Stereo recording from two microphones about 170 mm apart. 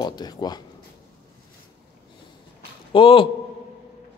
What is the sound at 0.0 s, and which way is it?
Speech, 25° left (ahead or behind).